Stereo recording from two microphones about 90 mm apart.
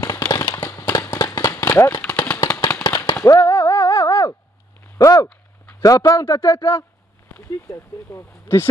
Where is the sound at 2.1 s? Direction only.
10° left (ahead or behind).